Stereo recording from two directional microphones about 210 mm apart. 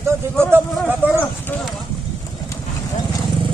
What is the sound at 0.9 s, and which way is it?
Clip-clop, 10° right (ahead or behind).